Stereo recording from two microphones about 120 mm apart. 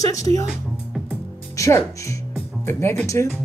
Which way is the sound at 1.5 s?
25° left (ahead or behind).